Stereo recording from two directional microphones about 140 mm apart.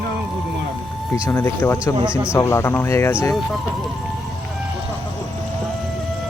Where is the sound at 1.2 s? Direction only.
20° left (ahead or behind).